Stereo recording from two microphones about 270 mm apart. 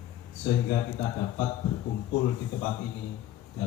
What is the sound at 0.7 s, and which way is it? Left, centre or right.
A man's voice, centre.